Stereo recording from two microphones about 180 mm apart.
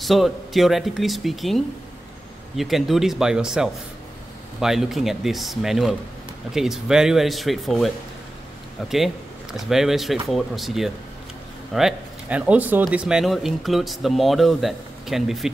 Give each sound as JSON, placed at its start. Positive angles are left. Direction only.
{"t": 0.0, "sound": "speech", "side_deg": 0}